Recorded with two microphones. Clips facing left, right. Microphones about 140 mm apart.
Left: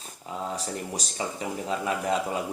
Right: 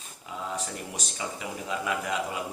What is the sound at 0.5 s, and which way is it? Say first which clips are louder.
A man's voice: left 2 dB; 35° left (ahead or behind).